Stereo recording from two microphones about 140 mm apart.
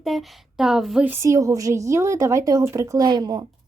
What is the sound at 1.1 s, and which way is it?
A woman's voice, 20° right (ahead or behind).